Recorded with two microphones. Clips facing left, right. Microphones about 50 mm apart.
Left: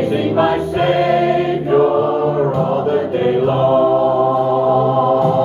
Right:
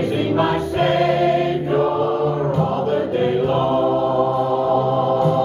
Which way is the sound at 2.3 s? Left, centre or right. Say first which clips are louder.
Left 4 dB; left.